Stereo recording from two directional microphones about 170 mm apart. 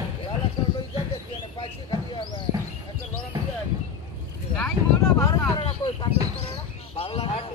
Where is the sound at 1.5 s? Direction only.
30° left (ahead or behind).